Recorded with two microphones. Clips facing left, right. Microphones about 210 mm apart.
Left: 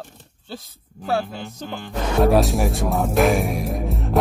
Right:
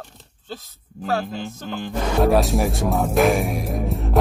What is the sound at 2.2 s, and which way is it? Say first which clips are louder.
Speech: left 1 dB; centre (ahead or behind).